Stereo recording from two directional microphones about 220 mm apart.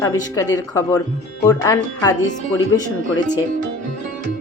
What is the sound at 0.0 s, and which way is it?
Speech, 15° left (ahead or behind).